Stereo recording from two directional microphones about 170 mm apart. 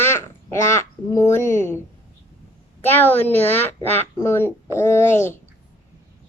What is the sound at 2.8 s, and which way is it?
Speech, 10° left (ahead or behind).